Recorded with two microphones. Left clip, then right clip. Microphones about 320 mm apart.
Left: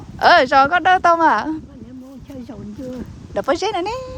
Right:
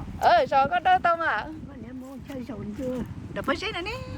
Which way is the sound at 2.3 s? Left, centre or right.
Centre.